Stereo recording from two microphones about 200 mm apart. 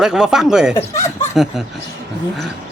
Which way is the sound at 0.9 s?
15° left (ahead or behind).